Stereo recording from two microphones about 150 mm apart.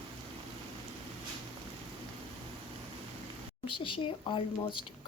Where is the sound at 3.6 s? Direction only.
35° left (ahead or behind).